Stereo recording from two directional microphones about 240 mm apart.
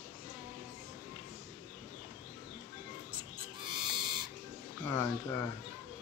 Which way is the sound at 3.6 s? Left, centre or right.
Centre.